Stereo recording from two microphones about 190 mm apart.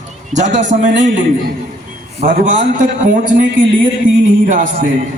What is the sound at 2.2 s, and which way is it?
A man's voice, 45° right (ahead or behind).